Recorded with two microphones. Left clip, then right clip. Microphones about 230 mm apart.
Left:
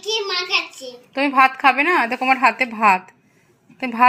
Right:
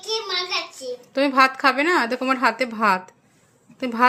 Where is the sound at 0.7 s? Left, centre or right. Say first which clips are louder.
Right 1 dB; right.